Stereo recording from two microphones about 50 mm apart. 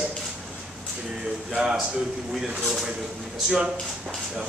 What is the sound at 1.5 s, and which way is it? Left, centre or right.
A man's voice, centre.